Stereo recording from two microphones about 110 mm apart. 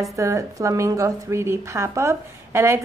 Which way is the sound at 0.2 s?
30° right (ahead or behind).